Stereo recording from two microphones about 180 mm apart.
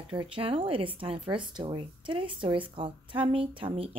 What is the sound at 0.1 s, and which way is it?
Speech, 30° right (ahead or behind).